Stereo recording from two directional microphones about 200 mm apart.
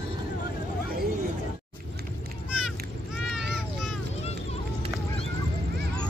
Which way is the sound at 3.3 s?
5° right (ahead or behind).